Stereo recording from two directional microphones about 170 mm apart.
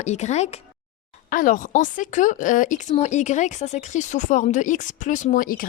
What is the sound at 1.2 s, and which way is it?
Speech, 50° left (ahead or behind).